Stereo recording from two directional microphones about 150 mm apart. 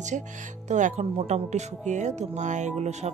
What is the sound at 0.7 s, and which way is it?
Speech, 55° right (ahead or behind).